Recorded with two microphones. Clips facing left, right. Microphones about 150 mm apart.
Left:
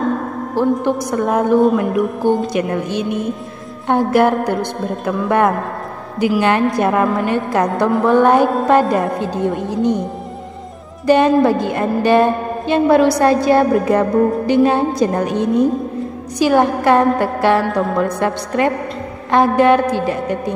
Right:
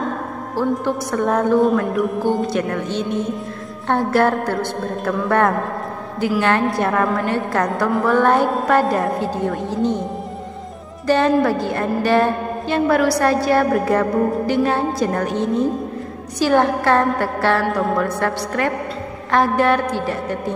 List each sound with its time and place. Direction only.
0.6 s a woman's voice: 15° left (ahead or behind)
6.1 s a woman's voice: 15° left (ahead or behind)
11.1 s a woman's voice: 15° left (ahead or behind)